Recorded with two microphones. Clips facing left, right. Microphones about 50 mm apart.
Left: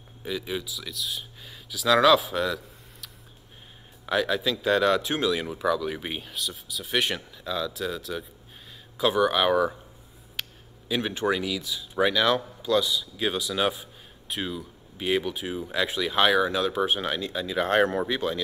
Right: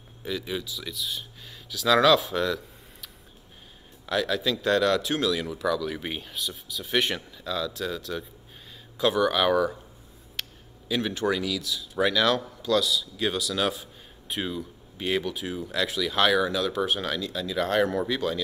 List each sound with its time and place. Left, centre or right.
0.2 s speech: centre
5.9 s speech: centre
10.4 s a sound: centre
10.9 s speech: centre
14.2 s speech: centre; by 17.7 s left
17.7 s speech: left
18.0 s speech: centre